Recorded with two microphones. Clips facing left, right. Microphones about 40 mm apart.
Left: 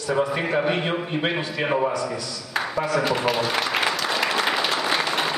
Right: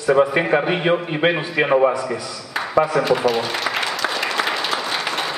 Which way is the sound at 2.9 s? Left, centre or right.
Centre.